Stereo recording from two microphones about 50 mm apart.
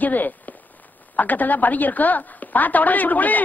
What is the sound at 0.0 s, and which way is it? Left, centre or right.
A woman's voice, left.